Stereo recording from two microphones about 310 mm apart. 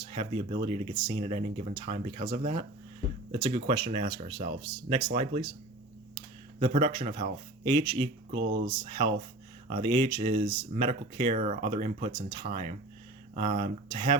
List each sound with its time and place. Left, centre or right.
0.0 s speech: centre
8.3 s speech: right
8.6 s speech: centre